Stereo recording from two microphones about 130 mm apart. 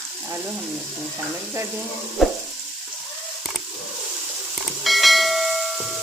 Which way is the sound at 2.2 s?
Centre (ahead or behind).